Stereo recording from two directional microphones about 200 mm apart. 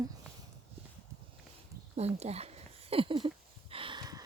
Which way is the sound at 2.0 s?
30° right (ahead or behind).